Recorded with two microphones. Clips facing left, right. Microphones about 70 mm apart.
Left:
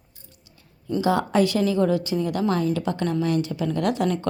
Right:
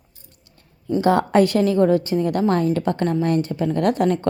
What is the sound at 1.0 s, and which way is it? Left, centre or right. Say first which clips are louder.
A woman's voice: right 4 dB; right.